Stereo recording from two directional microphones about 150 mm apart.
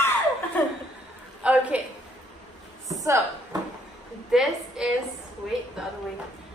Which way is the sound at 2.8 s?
20° right (ahead or behind).